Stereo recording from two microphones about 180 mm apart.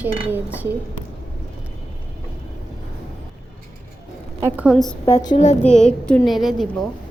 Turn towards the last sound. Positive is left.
turn(degrees=0)  # may be behind; listen again after turning